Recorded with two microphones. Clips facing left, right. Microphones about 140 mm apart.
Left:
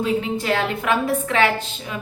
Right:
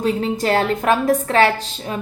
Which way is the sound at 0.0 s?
40° right (ahead or behind).